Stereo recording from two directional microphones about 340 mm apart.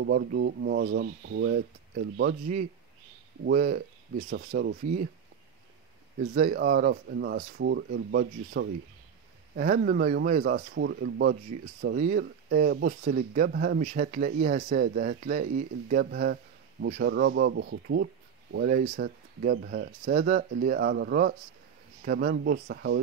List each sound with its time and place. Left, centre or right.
0.0 s speech: right
6.3 s speech: right